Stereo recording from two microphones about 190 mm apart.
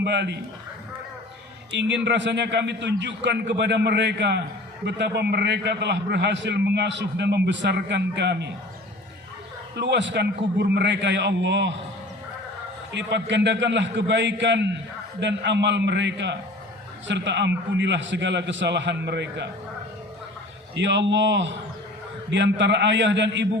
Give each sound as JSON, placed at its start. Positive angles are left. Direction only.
{"t": 0.0, "sound": "a man's voice", "side_deg": -65}
{"t": 1.7, "sound": "a man's voice", "side_deg": -70}
{"t": 9.7, "sound": "a man's voice", "side_deg": -65}
{"t": 12.9, "sound": "a man's voice", "side_deg": -70}
{"t": 20.7, "sound": "a man's voice", "side_deg": -70}